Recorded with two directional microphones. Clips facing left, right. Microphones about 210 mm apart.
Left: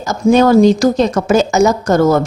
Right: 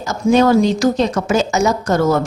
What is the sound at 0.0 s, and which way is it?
A woman's voice, 45° left (ahead or behind).